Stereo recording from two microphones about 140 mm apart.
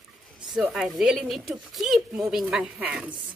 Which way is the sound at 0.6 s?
5° right (ahead or behind).